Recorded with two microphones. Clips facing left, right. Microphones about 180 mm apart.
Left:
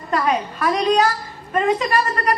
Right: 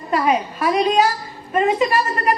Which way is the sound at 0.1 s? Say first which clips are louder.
Right 2 dB; 10° right (ahead or behind).